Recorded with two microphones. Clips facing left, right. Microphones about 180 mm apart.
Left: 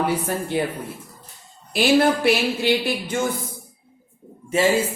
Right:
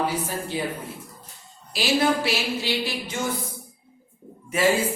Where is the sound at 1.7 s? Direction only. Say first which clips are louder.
Left 5 dB; 55° left (ahead or behind).